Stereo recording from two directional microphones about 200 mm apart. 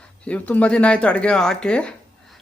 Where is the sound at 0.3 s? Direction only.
5° left (ahead or behind).